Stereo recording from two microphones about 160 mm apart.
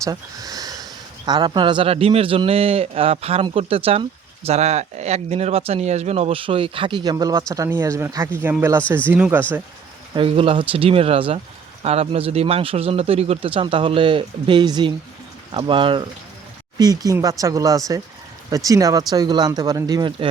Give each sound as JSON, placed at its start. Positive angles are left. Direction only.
{"t": 0.0, "sound": "a man's voice", "side_deg": -20}
{"t": 10.2, "sound": "a man's voice", "side_deg": -35}